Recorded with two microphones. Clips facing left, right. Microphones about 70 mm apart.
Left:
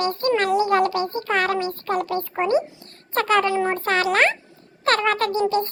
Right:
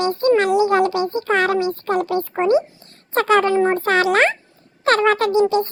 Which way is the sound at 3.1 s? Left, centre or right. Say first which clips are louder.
Right 4 dB; right.